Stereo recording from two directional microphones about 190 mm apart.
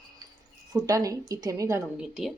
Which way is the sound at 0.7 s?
20° right (ahead or behind).